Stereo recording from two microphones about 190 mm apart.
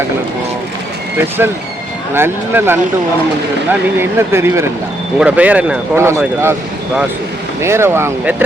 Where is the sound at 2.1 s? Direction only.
10° right (ahead or behind).